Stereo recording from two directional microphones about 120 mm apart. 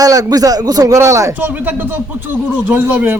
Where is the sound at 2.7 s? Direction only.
15° right (ahead or behind).